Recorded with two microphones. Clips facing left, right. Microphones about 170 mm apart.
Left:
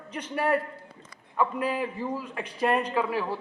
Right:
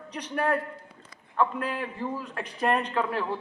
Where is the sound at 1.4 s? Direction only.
10° left (ahead or behind).